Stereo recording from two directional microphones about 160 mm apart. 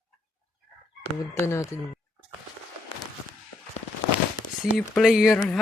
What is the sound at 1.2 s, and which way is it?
Speech, 20° left (ahead or behind).